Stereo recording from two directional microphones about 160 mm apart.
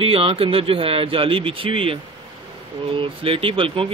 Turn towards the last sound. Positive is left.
turn(degrees=-35)  # may be behind; listen again after turning